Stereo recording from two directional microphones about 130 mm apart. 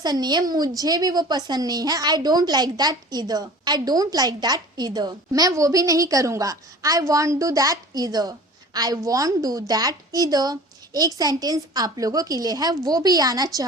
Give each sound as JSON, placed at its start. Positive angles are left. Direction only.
{"t": 0.0, "sound": "a woman's voice", "side_deg": -30}